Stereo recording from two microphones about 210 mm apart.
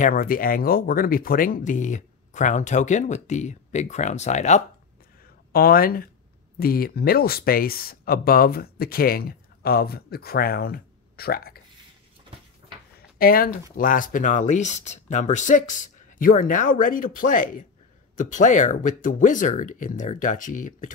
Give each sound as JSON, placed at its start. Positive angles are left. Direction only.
{"t": 0.0, "sound": "speech", "side_deg": 40}
{"t": 5.5, "sound": "speech", "side_deg": 45}
{"t": 13.2, "sound": "speech", "side_deg": 45}